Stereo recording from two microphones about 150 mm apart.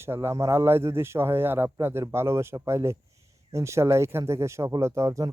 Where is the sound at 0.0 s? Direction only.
15° right (ahead or behind).